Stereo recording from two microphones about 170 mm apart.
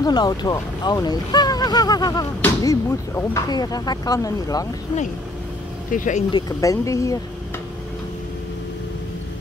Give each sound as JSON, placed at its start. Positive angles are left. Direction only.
{"t": 0.0, "sound": "speech", "side_deg": 25}
{"t": 5.9, "sound": "speech", "side_deg": 50}
{"t": 6.3, "sound": "speech", "side_deg": 20}